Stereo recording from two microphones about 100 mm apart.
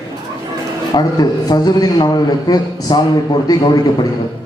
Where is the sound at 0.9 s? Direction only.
50° left (ahead or behind).